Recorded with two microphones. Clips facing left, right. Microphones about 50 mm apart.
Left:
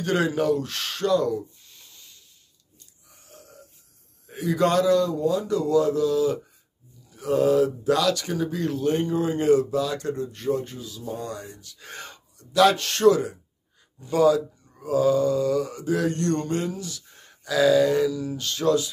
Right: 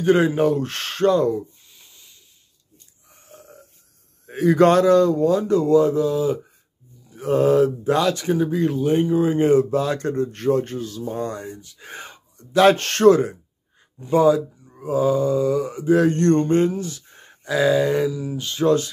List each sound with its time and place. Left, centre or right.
0.0 s speech: right
3.1 s burping: right
4.3 s speech: right
7.1 s speech: right; by 9.3 s centre
9.3 s speech: right
11.0 s speech: right; by 12.4 s centre
12.5 s speech: right
13.9 s speech: right
15.9 s speech: right